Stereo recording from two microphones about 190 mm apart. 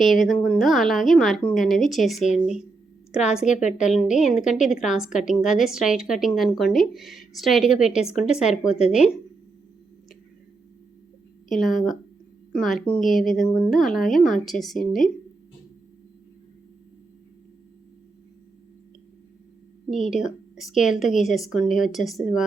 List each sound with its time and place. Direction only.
0.0 s a woman's voice: centre (ahead or behind)
3.4 s a woman's voice: 40° left (ahead or behind)
3.7 s a woman's voice: 5° right (ahead or behind)
11.5 s a woman's voice: centre (ahead or behind)
20.1 s a woman's voice: centre (ahead or behind)